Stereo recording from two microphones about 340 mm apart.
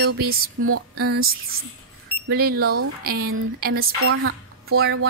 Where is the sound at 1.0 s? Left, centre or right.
Right.